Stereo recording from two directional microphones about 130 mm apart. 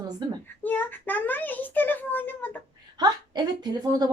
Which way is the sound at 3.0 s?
30° right (ahead or behind).